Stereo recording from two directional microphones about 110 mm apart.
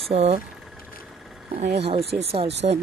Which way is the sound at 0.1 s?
70° right (ahead or behind).